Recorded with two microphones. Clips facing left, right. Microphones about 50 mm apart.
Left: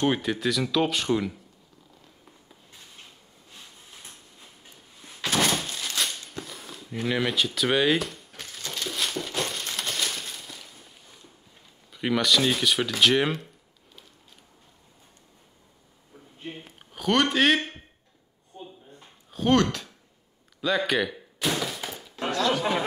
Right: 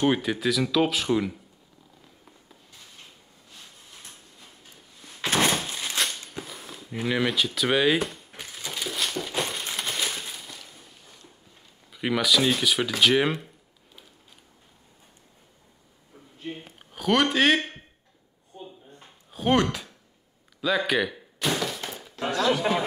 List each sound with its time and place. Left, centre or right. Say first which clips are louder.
0.0 s speech: right 1 dB; centre
5.2 s thunk: right 1 dB; right
6.3 s speech: even; centre
8.4 s crumpling: right 1 dB; centre
11.9 s speech: even; centre
16.5 s a sound: right 1 dB; centre
18.9 s a sound: left 5 dB; centre
20.6 s slam: right 1 dB; centre
22.3 s a sound: right 1 dB; centre